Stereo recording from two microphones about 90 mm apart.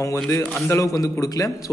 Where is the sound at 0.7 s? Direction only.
35° left (ahead or behind).